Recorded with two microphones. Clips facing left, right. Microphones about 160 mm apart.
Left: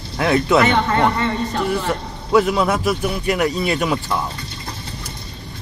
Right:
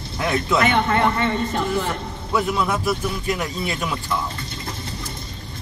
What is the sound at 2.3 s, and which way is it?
Speech, 75° left (ahead or behind).